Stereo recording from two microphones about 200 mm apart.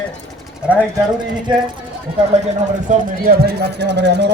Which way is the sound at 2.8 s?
50° right (ahead or behind).